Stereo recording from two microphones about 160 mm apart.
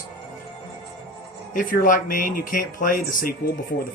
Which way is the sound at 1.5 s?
55° left (ahead or behind).